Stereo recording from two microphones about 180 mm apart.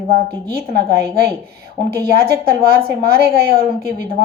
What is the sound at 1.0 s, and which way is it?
A woman's voice, 60° right (ahead or behind).